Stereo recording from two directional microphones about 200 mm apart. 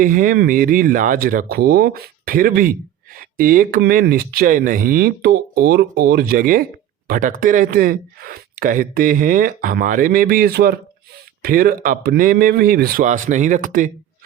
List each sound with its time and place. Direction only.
0.0 s speech: 45° right (ahead or behind)